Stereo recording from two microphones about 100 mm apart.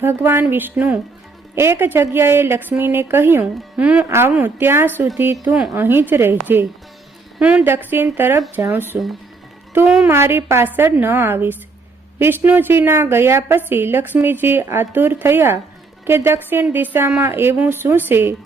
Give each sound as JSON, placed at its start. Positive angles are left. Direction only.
{"t": 0.0, "sound": "a woman's voice", "side_deg": -25}
{"t": 1.5, "sound": "a woman's voice", "side_deg": -25}
{"t": 5.5, "sound": "speech", "side_deg": -5}
{"t": 5.7, "sound": "a woman's voice", "side_deg": -20}
{"t": 7.3, "sound": "a woman's voice", "side_deg": -15}
{"t": 9.8, "sound": "speech", "side_deg": -10}
{"t": 10.1, "sound": "a woman's voice", "side_deg": -25}